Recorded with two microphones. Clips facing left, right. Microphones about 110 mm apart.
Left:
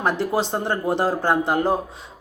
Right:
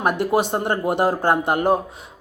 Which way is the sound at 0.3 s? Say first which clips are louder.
Right 3 dB; 15° right (ahead or behind).